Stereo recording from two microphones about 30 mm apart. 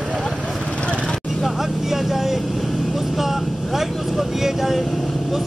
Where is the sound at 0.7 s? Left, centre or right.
Left.